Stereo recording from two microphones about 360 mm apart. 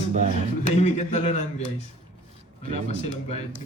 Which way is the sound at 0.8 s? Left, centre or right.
Centre.